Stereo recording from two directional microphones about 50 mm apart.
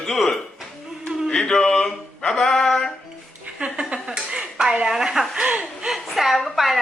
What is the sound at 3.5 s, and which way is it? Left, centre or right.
Dishes, centre.